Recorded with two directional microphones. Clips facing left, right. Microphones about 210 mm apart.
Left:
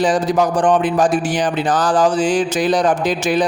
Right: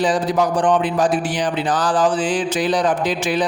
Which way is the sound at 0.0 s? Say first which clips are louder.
Left 2 dB; 45° left (ahead or behind).